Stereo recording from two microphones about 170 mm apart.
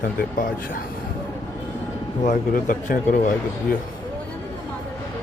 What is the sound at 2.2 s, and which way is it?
Speech, 50° left (ahead or behind).